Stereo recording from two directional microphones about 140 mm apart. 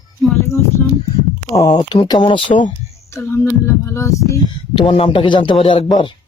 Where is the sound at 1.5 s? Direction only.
30° left (ahead or behind).